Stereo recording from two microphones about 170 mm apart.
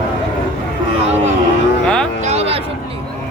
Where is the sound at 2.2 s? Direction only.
40° right (ahead or behind).